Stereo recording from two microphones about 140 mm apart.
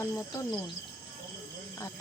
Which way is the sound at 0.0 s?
20° left (ahead or behind).